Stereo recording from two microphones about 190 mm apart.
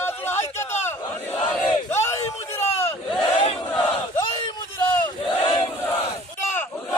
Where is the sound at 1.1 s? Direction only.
10° left (ahead or behind).